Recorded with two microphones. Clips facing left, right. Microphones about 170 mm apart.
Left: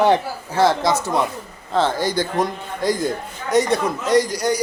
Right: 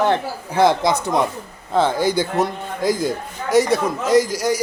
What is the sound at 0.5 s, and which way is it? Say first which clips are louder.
A man's voice: right 1 dB; 15° right (ahead or behind).